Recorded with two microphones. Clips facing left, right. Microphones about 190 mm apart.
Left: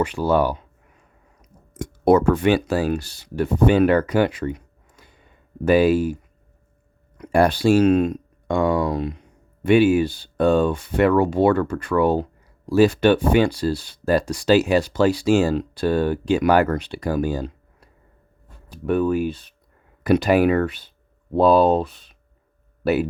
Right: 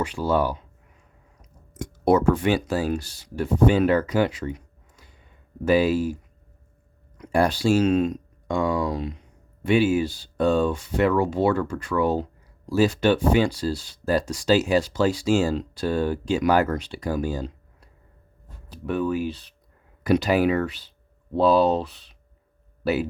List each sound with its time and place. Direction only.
0.0 s speech: 60° left (ahead or behind)
1.7 s speech: 55° left (ahead or behind)
7.2 s speech: 60° left (ahead or behind)
18.9 s speech: 50° left (ahead or behind)